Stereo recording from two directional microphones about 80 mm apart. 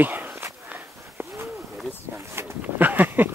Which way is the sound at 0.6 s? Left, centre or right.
Right.